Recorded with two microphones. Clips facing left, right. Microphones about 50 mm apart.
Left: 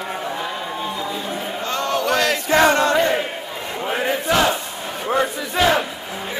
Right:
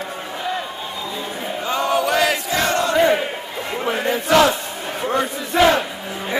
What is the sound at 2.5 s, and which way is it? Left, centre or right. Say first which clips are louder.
Crowd: left 4 dB; left.